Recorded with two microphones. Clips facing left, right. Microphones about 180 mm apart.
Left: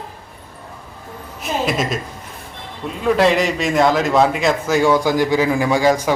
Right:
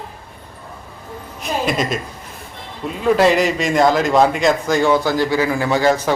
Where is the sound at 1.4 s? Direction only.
Centre (ahead or behind).